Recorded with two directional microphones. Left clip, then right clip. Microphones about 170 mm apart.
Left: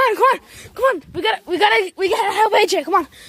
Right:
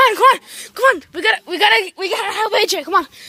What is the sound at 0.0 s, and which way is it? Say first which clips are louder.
Speech: right 4 dB; centre (ahead or behind).